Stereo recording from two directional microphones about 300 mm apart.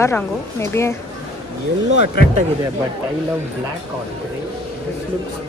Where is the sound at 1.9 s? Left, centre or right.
Right.